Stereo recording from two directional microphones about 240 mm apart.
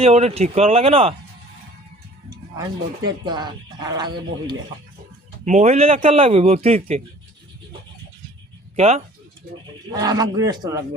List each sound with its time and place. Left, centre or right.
0.0 s a man's voice: right
2.3 s speech: centre
5.5 s a man's voice: right
8.7 s speech: right
9.9 s speech: centre